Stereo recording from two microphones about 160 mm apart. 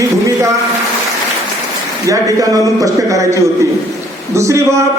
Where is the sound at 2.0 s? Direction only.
20° right (ahead or behind).